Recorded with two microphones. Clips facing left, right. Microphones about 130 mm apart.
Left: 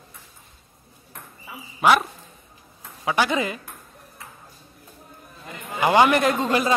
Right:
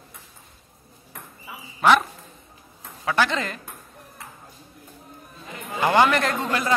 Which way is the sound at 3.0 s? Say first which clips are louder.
Left 1 dB; 15° left (ahead or behind).